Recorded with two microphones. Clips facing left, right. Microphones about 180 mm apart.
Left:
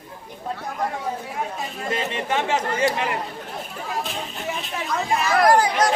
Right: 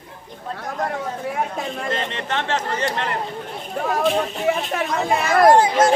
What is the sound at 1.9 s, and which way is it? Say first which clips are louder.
Speech: left 4 dB; 10° left (ahead or behind).